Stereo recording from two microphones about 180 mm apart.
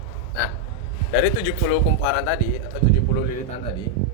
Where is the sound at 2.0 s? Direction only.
90° left.